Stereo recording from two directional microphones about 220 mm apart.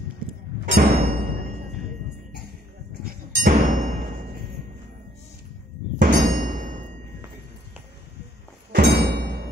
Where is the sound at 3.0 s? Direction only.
40° right (ahead or behind).